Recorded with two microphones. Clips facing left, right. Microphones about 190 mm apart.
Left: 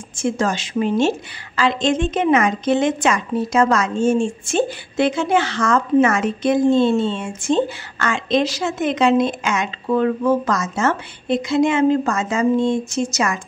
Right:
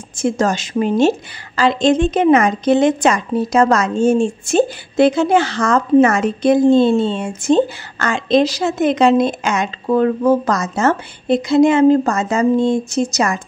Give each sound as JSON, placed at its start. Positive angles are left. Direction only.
{"t": 0.1, "sound": "a woman's voice", "side_deg": -40}